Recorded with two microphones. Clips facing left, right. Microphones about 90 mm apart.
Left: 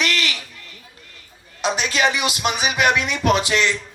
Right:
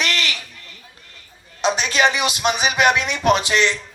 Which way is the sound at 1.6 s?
25° right (ahead or behind).